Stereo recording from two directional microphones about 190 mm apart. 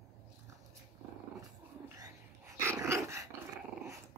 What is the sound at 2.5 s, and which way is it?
Dog, 15° right (ahead or behind).